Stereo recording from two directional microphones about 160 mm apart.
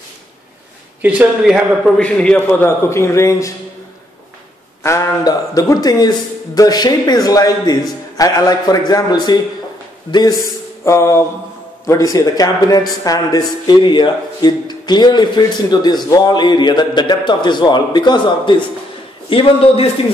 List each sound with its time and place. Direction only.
1.0 s speech: 5° right (ahead or behind)
2.0 s a man's voice: 5° left (ahead or behind)
4.8 s a man's voice: 20° left (ahead or behind); by 19.9 s 35° left (ahead or behind)